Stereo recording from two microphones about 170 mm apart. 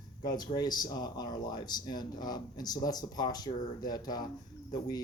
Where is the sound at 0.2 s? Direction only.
25° left (ahead or behind).